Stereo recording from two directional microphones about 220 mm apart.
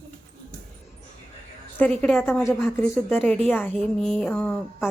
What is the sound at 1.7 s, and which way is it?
A woman's voice, 5° left (ahead or behind).